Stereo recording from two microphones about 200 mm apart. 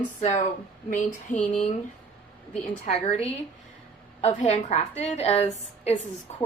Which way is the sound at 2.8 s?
30° left (ahead or behind).